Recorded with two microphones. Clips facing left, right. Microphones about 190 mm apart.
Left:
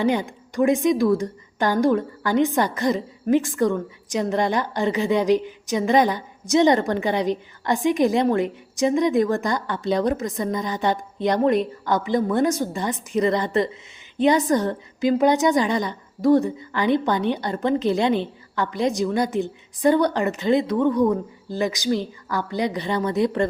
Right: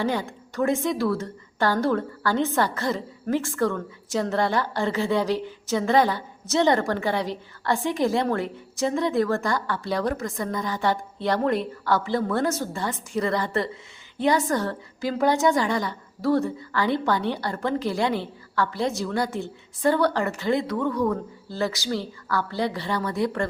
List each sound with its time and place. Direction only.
0.0 s a woman's voice: 20° left (ahead or behind)